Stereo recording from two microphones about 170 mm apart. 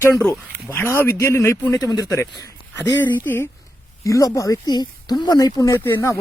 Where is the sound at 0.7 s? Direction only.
15° left (ahead or behind).